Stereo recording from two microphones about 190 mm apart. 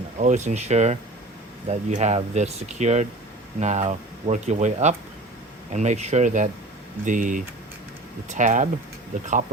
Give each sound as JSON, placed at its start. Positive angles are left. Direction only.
{"t": 0.2, "sound": "speech", "side_deg": -40}